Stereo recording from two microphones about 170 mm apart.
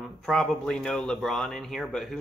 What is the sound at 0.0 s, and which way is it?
Speech, centre (ahead or behind).